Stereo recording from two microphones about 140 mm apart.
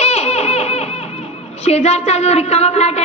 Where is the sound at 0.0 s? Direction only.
50° left (ahead or behind).